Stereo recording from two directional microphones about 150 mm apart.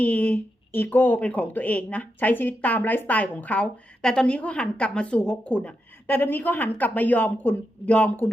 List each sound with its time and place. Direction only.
0.0 s speech: 10° left (ahead or behind)